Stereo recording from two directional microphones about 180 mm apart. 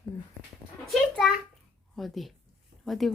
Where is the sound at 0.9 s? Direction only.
Centre (ahead or behind).